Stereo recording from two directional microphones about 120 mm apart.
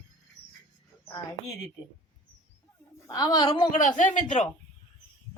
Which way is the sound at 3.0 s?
35° left (ahead or behind).